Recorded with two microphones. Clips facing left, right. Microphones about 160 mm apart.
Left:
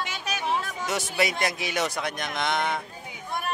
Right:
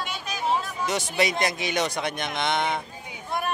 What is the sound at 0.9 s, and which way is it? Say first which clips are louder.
A man's voice: right 2 dB; 5° left (ahead or behind).